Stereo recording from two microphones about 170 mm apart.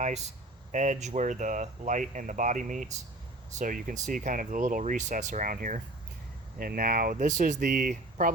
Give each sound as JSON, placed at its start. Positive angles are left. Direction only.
{"t": 0.0, "sound": "speech", "side_deg": -40}